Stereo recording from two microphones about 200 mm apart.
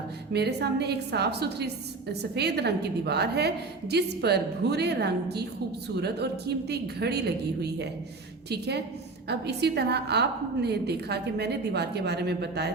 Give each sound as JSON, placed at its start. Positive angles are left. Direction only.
{"t": 0.3, "sound": "a woman's voice", "side_deg": -55}
{"t": 6.7, "sound": "a woman's voice", "side_deg": -55}